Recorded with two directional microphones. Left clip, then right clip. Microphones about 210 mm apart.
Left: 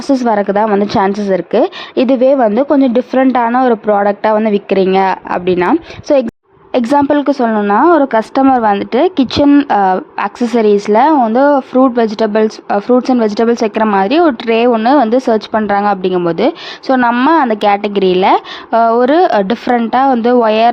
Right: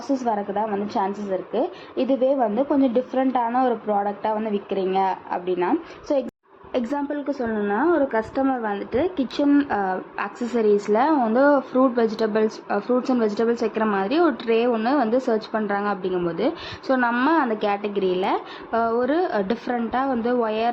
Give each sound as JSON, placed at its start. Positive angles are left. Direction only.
{"t": 0.1, "sound": "speech", "side_deg": 55}